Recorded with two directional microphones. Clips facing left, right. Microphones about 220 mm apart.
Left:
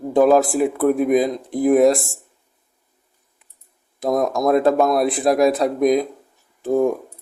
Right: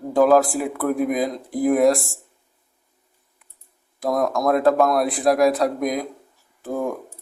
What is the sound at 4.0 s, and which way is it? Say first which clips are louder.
A man's voice: left 2 dB; 20° left (ahead or behind).